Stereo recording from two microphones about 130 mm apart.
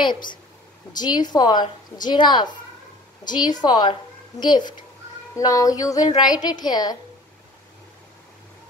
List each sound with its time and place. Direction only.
0.9 s a woman's voice: 30° left (ahead or behind)